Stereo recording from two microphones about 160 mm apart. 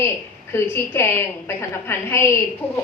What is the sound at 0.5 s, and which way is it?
A woman's voice, 15° left (ahead or behind).